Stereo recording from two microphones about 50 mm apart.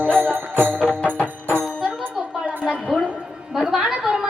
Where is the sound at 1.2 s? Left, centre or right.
Right.